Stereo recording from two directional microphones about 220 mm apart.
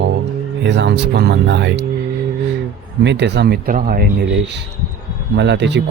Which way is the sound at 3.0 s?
55° right (ahead or behind).